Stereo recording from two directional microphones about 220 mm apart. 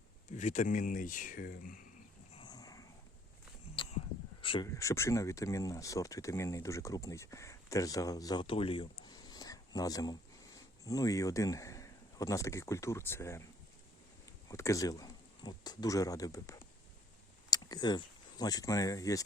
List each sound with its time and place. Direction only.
0.3 s speech: 35° left (ahead or behind)
2.4 s a sound: 15° left (ahead or behind)
4.7 s speech: 15° left (ahead or behind)
14.4 s speech: 15° left (ahead or behind)